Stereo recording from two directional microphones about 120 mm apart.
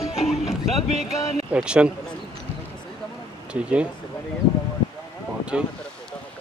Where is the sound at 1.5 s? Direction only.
10° right (ahead or behind).